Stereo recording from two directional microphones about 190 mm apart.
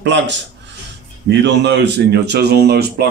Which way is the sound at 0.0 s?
65° right (ahead or behind).